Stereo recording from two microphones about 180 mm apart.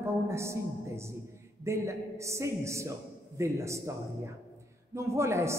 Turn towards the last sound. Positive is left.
turn(degrees=-15)  # may be behind; listen again after turning